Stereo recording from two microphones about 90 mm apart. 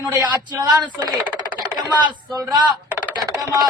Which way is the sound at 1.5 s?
50° right (ahead or behind).